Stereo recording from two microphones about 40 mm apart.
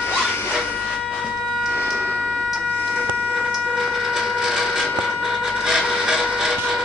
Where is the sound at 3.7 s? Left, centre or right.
Centre.